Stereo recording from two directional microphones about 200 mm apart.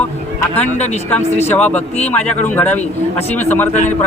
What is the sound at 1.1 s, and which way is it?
Speech, 10° left (ahead or behind).